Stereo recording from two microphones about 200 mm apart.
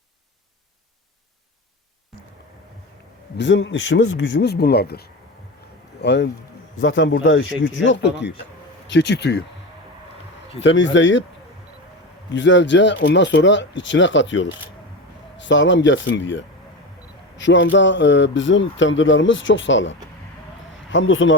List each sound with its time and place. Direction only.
3.3 s speech: 65° left (ahead or behind)
6.7 s speech: 70° left (ahead or behind)
10.6 s speech: 65° left (ahead or behind)
12.3 s speech: 65° left (ahead or behind)